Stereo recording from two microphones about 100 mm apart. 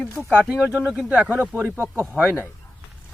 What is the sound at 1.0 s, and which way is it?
Speech, 15° right (ahead or behind).